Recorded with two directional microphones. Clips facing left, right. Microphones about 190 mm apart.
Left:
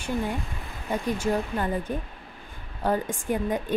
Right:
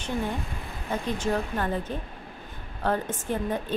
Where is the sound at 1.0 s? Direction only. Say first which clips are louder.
Left 2 dB; 10° left (ahead or behind).